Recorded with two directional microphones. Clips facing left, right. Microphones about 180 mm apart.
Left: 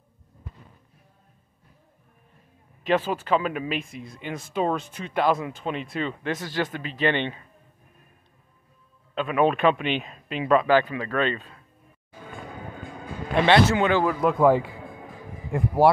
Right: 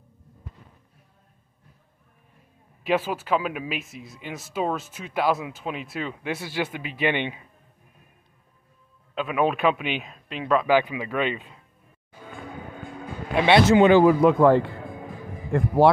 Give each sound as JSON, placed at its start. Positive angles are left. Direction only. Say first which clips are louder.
{"t": 2.8, "sound": "speech", "louder": "left 1 dB", "side_deg": -10}
{"t": 9.1, "sound": "speech", "louder": "left 2 dB", "side_deg": -5}
{"t": 10.7, "sound": "speech", "louder": "even", "side_deg": -10}
{"t": 13.3, "sound": "speech", "louder": "even", "side_deg": -5}
{"t": 13.7, "sound": "speech", "louder": "right 7 dB", "side_deg": -20}
{"t": 14.2, "sound": "speech", "louder": "right 3 dB", "side_deg": 5}